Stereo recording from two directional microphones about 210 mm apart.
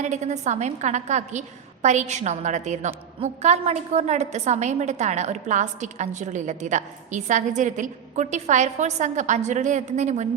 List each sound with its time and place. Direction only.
0.0 s a woman's voice: 35° right (ahead or behind)